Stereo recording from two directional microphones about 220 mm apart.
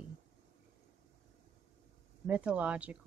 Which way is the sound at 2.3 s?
5° right (ahead or behind).